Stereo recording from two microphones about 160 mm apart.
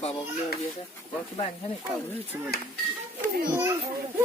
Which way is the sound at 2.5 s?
75° left (ahead or behind).